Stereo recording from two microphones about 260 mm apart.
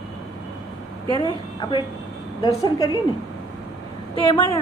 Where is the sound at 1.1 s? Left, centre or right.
Centre.